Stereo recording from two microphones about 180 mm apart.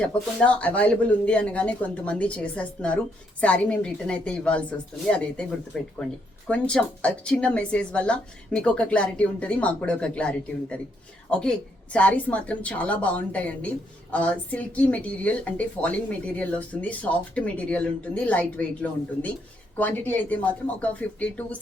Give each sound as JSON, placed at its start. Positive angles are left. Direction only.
{"t": 0.3, "sound": "a woman's voice", "side_deg": 5}